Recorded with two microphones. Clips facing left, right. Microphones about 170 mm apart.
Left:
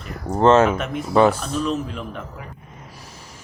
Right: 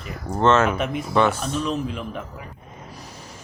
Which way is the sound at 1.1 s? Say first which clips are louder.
Left 5 dB; 35° left (ahead or behind).